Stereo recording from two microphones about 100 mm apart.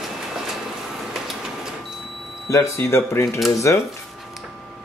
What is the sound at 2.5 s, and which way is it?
Speech, 30° left (ahead or behind).